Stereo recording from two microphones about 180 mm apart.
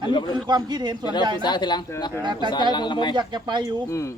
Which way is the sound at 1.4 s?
25° left (ahead or behind).